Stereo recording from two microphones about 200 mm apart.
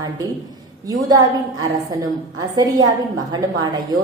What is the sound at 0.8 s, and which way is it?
Speech, 20° right (ahead or behind).